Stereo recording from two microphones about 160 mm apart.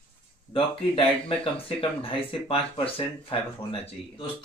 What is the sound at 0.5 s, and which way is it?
Speech, 35° left (ahead or behind).